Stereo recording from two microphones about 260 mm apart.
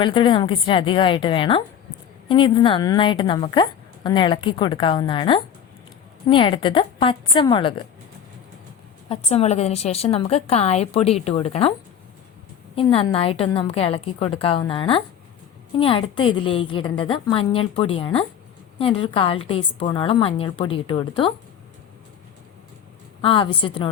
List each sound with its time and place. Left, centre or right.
0.0 s a woman's voice: centre
9.0 s a woman's voice: left
12.7 s a woman's voice: left
23.2 s a woman's voice: left